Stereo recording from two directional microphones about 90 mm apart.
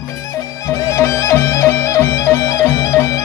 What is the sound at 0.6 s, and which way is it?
Music, 35° left (ahead or behind).